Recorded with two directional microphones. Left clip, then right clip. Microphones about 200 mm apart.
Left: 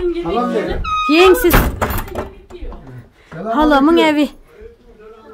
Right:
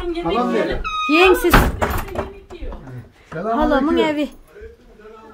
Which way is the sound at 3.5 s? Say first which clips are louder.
Left 5 dB; 25° left (ahead or behind).